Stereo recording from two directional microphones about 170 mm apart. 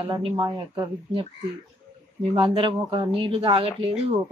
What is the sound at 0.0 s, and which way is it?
Speech, 30° right (ahead or behind).